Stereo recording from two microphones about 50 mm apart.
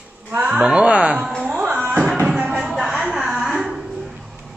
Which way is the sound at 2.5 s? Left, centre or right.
Centre.